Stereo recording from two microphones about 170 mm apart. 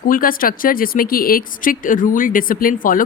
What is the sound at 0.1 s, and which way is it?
A woman's voice, 55° left (ahead or behind).